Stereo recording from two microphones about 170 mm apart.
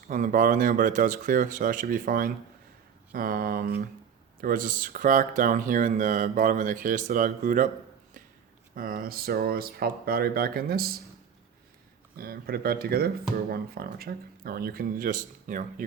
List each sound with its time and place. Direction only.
0.1 s speech: 50° right (ahead or behind)
8.7 s speech: 55° right (ahead or behind)
12.1 s speech: 60° right (ahead or behind)